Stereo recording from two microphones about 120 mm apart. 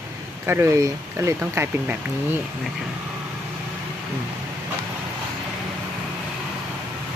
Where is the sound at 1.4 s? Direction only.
10° right (ahead or behind).